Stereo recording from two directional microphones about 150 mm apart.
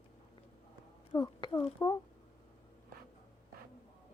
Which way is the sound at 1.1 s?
30° left (ahead or behind).